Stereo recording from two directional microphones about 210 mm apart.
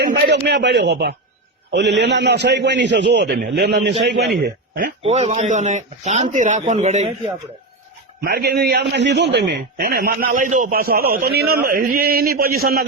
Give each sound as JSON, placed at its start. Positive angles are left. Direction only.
{"t": 0.0, "sound": "a sound", "side_deg": -55}
{"t": 1.7, "sound": "a man's voice", "side_deg": -55}
{"t": 5.0, "sound": "a man's voice", "side_deg": -30}
{"t": 8.2, "sound": "a man's voice", "side_deg": -50}